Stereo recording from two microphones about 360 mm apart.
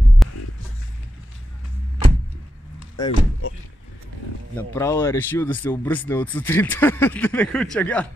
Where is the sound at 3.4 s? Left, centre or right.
Left.